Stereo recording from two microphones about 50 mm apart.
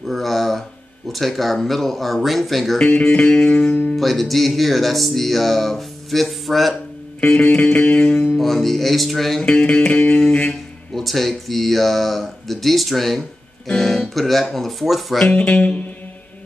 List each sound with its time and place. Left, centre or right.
0.0 s speech: centre
2.8 s music: left
3.9 s speech: centre
7.4 s music: left
8.0 s speech: centre
9.4 s music: left
11.0 s speech: centre
15.3 s music: left